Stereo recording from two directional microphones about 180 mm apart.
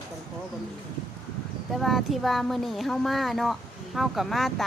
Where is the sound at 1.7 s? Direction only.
Centre (ahead or behind).